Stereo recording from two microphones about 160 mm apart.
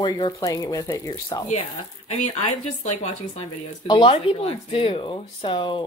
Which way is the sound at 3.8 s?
30° left (ahead or behind).